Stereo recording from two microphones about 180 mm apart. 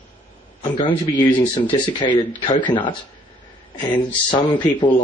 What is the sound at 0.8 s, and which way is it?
Speech, 20° left (ahead or behind).